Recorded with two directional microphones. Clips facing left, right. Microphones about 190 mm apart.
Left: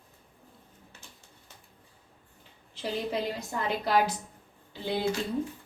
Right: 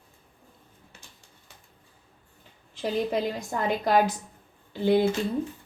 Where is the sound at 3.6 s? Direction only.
45° right (ahead or behind).